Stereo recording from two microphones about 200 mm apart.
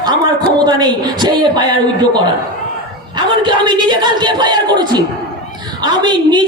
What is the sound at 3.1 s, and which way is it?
A man's voice, 25° right (ahead or behind).